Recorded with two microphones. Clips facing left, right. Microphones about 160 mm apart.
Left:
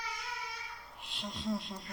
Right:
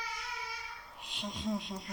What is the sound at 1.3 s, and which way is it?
Speech, 15° right (ahead or behind).